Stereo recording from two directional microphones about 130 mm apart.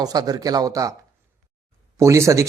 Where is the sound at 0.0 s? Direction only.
30° right (ahead or behind).